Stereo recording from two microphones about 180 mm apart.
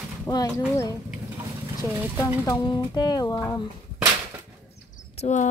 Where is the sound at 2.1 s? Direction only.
20° left (ahead or behind).